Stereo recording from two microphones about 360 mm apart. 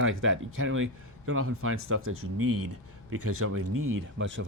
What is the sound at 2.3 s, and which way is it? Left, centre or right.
Speech, right.